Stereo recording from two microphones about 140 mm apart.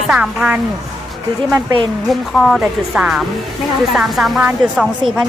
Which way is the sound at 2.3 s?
Centre (ahead or behind).